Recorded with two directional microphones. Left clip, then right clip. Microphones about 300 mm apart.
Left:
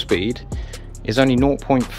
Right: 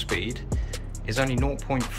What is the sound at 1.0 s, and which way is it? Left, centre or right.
Speech, left.